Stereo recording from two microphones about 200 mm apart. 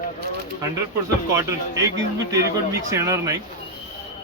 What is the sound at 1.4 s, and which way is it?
Speech, 15° right (ahead or behind).